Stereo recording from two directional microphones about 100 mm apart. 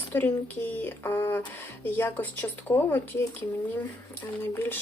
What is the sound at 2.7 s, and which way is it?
Speech, 45° left (ahead or behind).